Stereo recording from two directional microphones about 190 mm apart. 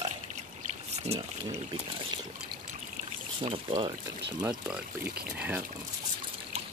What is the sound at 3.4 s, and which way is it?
Speech, 30° right (ahead or behind).